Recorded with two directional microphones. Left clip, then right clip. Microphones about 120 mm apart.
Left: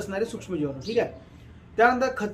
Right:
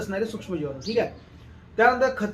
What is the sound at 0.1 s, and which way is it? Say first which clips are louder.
A man's voice: left 1 dB; 30° left (ahead or behind).